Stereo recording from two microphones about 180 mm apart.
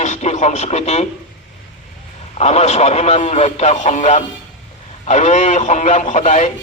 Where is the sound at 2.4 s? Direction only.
35° left (ahead or behind).